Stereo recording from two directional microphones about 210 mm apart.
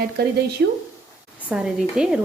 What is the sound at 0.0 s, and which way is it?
Speech, 50° right (ahead or behind).